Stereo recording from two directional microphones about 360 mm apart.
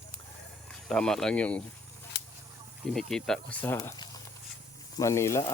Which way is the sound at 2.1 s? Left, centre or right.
Left.